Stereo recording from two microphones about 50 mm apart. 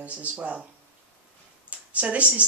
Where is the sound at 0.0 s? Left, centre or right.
Right.